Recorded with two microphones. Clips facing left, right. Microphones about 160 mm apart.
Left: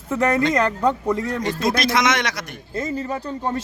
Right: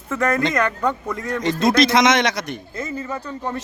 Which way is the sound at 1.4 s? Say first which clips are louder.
Right 5 dB; 20° right (ahead or behind).